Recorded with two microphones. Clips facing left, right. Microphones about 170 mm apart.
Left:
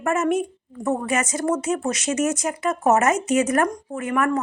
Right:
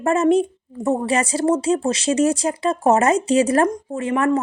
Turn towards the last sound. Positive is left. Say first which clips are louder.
# right 3 dB
turn(degrees=-25)  # may be behind; listen again after turning